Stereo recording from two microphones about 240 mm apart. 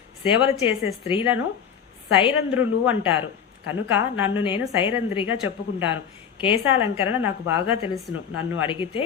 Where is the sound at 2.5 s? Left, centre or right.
Centre.